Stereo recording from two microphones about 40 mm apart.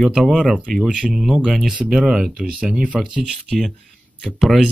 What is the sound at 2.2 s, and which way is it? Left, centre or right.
Speech, right.